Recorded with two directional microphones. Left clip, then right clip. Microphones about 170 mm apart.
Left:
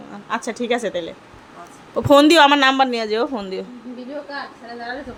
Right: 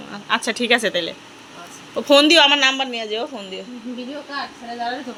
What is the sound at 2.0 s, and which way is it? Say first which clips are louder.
Speech: left 1 dB; 40° left (ahead or behind).